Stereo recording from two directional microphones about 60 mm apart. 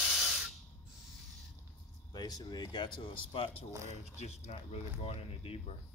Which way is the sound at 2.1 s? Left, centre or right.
Left.